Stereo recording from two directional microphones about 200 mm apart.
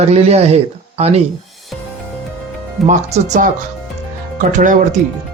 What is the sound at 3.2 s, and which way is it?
Speech, 35° right (ahead or behind).